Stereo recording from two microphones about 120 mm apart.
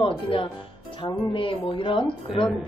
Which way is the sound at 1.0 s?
45° left (ahead or behind).